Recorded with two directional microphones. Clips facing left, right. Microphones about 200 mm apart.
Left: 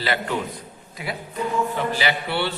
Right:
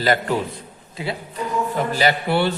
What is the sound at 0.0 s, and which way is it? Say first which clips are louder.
Speech: right 5 dB; 45° right (ahead or behind).